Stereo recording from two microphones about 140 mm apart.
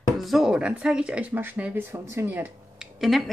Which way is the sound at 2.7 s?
Centre (ahead or behind).